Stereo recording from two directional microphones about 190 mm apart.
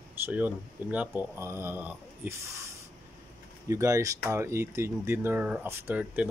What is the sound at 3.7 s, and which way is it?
Speech, 15° right (ahead or behind).